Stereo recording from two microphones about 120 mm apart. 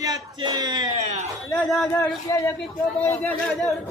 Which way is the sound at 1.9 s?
20° left (ahead or behind).